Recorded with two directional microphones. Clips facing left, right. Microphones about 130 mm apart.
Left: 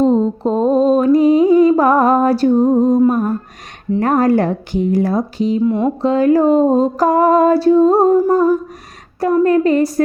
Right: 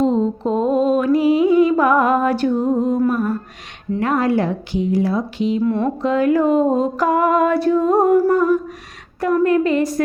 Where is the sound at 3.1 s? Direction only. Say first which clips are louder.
Left 3 dB; 45° left (ahead or behind).